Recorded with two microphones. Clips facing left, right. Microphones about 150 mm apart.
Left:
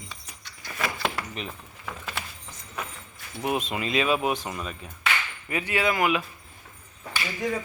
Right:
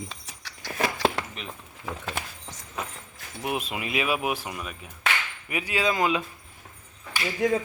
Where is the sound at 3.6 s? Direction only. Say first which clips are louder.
Left 3 dB; 10° right (ahead or behind).